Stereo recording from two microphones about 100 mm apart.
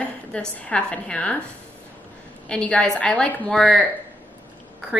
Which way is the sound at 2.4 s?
10° left (ahead or behind).